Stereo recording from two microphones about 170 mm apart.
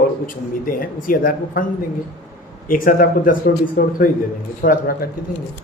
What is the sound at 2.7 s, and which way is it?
Speech, 55° left (ahead or behind).